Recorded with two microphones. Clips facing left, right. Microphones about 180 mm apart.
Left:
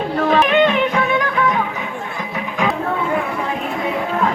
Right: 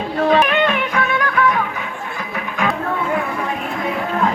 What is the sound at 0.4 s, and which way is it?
Music, 20° left (ahead or behind).